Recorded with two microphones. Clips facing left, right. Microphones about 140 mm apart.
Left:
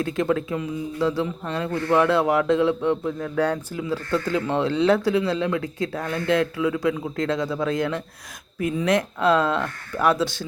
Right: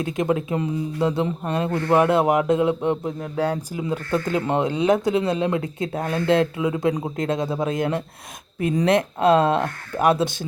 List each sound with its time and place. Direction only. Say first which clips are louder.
0.0 s speech: even; 20° right (ahead or behind)
0.5 s speech: right 3 dB; 35° right (ahead or behind)
1.0 s speech: right 1 dB; 20° right (ahead or behind)
8.9 s speech: right 2 dB; 25° right (ahead or behind)